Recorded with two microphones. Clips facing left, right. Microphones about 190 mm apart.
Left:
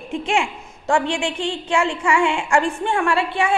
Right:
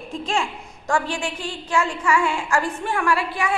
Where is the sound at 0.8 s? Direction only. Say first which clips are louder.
Left 4 dB; 25° left (ahead or behind).